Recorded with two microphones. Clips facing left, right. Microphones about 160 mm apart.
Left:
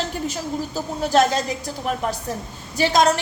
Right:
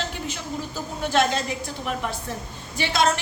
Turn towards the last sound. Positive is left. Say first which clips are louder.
# left 6 dB
turn(degrees=40)  # may be behind; listen again after turning